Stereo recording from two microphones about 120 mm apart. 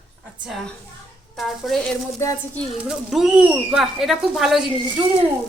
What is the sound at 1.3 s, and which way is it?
Speech, centre (ahead or behind).